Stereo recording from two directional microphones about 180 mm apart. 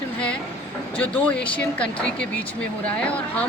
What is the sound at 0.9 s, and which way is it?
Speech, 5° left (ahead or behind).